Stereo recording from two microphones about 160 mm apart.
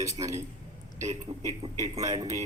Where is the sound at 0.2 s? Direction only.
35° right (ahead or behind).